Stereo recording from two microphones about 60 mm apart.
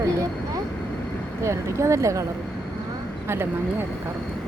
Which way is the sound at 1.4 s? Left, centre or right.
Right.